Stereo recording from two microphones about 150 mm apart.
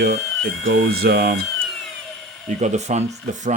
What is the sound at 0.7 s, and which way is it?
Speech, 90° right.